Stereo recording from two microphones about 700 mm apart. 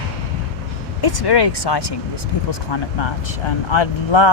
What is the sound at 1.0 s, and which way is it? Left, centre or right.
Speech, left.